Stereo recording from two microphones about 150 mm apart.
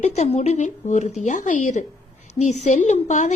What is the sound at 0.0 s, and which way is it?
A woman's voice, 45° left (ahead or behind).